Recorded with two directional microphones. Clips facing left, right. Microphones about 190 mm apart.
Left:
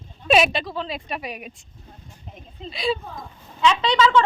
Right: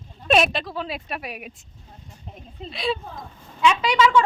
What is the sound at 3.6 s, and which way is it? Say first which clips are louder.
Speech: even; 10° right (ahead or behind).